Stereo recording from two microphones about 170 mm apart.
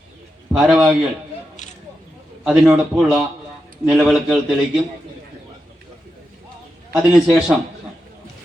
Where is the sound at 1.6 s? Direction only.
45° left (ahead or behind).